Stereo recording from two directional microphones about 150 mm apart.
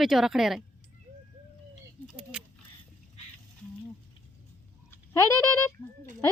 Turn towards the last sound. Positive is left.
turn(degrees=20)  # may be behind; listen again after turning